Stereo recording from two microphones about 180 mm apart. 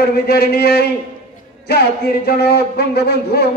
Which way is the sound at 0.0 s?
60° left (ahead or behind).